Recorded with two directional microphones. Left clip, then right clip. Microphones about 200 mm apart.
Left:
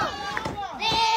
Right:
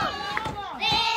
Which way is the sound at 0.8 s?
60° left (ahead or behind).